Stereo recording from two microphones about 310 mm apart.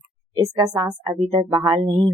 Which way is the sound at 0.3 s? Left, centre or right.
Centre.